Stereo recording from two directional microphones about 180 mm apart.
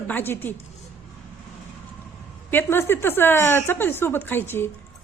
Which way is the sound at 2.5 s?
10° left (ahead or behind).